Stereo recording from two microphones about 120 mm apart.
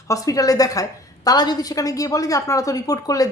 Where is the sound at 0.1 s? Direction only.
30° left (ahead or behind).